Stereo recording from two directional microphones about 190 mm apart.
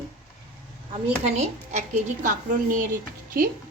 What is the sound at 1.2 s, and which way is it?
Speech, 35° right (ahead or behind).